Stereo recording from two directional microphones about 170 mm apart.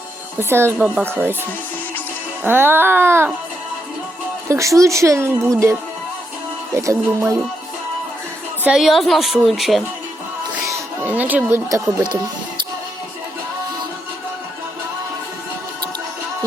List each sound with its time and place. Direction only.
0.3 s a woman's voice: 15° right (ahead or behind)
2.4 s a woman's voice: 15° right (ahead or behind)
4.4 s a woman's voice: 15° right (ahead or behind)
6.7 s a woman's voice: 15° right (ahead or behind)
8.6 s a woman's voice: 5° right (ahead or behind); by 12.2 s 20° right (ahead or behind)